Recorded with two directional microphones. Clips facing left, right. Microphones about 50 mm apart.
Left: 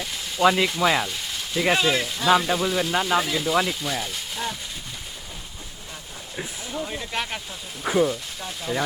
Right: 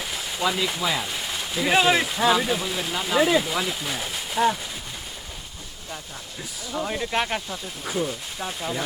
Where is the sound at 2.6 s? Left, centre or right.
Centre.